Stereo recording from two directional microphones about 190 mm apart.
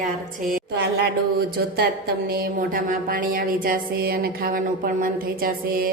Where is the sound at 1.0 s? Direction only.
60° right (ahead or behind).